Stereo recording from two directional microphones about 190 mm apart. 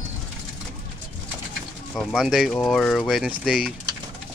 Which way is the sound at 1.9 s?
5° left (ahead or behind).